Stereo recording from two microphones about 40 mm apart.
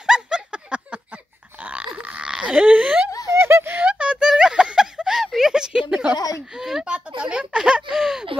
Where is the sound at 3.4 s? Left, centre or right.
Right.